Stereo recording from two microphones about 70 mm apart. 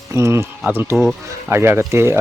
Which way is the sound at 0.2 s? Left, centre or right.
Right.